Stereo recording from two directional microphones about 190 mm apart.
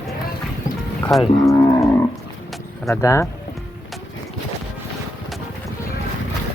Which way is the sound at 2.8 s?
15° left (ahead or behind).